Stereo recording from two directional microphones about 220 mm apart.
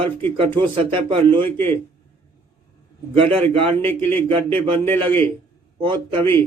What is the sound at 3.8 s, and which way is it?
Speech, 10° left (ahead or behind).